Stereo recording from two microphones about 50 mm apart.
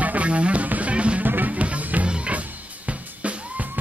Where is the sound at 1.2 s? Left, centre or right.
Right.